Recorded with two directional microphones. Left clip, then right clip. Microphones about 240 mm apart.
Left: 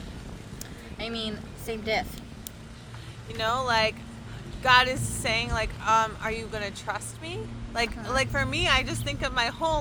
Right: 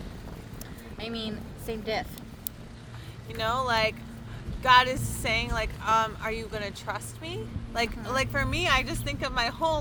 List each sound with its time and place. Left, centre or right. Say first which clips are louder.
0.9 s a woman's voice: left 2 dB; left
3.3 s speech: left 1 dB; centre